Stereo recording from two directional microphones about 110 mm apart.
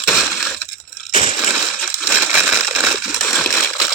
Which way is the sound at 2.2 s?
15° right (ahead or behind).